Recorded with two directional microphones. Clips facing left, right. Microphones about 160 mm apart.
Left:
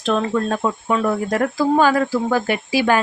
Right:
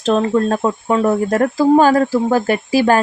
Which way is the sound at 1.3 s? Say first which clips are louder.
Right 5 dB; 40° right (ahead or behind).